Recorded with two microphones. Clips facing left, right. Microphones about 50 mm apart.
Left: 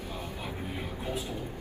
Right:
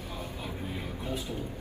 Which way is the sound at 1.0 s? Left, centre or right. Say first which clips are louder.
Left 1 dB; left.